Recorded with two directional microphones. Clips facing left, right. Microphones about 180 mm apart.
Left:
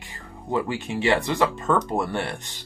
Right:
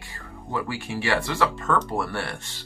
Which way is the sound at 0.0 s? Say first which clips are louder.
Even; 20° left (ahead or behind).